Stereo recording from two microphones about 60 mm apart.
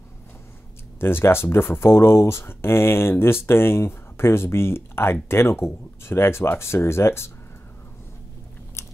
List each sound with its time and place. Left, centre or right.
0.9 s speech: left
8.8 s biting: left